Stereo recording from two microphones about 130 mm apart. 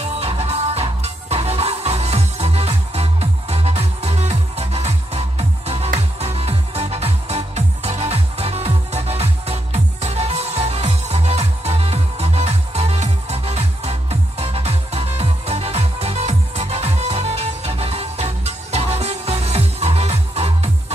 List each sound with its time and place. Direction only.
0.0 s music: 50° right (ahead or behind)